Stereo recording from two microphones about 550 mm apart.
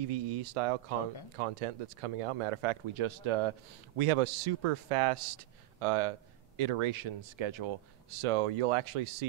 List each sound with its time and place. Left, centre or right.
0.0 s a man's voice: right